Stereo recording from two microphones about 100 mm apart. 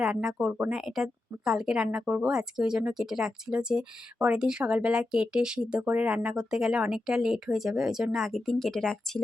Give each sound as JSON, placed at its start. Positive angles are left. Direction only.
{"t": 0.0, "sound": "speech", "side_deg": -5}